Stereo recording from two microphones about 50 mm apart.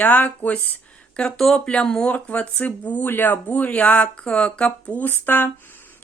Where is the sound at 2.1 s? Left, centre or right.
Left.